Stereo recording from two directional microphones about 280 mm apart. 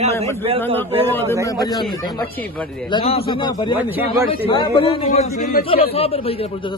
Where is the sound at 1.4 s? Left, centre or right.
Centre.